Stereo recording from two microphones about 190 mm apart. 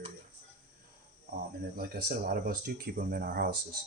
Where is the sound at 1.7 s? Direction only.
50° right (ahead or behind).